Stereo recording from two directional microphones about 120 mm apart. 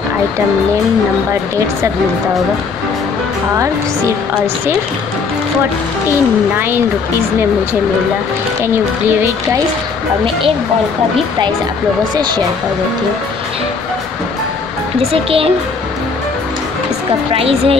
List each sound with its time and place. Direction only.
15.0 s speech: 50° right (ahead or behind)
17.3 s speech: 55° right (ahead or behind)